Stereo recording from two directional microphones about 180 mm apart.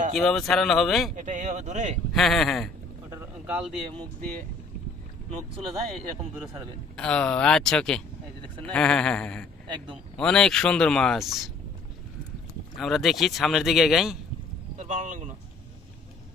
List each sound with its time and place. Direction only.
0.1 s speech: centre (ahead or behind)
1.1 s speech: 45° right (ahead or behind)
2.1 s speech: centre (ahead or behind)
3.1 s a sound: 10° right (ahead or behind)
6.9 s speech: 5° left (ahead or behind)
12.7 s speech: centre (ahead or behind)
14.8 s a sound: 45° right (ahead or behind)